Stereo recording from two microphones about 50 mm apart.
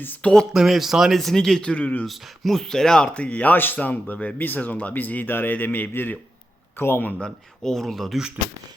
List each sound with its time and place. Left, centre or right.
0.2 s speech: left
0.5 s speech: centre
1.7 s speech: left
2.0 s speech: centre; by 3.5 s left
3.5 s speech: left
3.8 s a man's voice: left
7.6 s speech: centre